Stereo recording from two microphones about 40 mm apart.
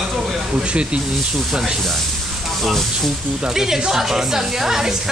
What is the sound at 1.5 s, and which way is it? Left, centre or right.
Speech, centre.